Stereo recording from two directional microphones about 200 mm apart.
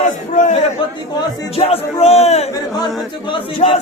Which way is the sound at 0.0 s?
35° left (ahead or behind).